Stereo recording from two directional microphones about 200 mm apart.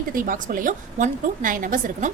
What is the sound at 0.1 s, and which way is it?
A woman's voice, 45° right (ahead or behind).